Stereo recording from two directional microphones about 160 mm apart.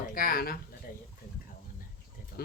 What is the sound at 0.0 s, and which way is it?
Speech, 65° left (ahead or behind).